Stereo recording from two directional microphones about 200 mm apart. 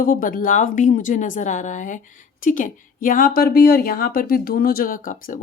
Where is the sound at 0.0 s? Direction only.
45° left (ahead or behind).